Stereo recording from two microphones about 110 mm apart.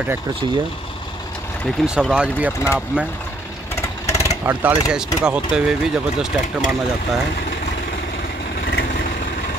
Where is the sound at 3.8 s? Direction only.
25° left (ahead or behind).